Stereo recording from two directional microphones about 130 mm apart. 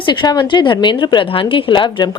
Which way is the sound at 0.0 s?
35° left (ahead or behind).